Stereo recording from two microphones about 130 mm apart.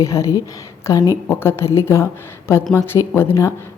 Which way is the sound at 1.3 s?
15° left (ahead or behind).